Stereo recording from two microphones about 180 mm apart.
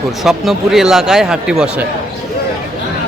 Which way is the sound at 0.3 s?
Centre (ahead or behind).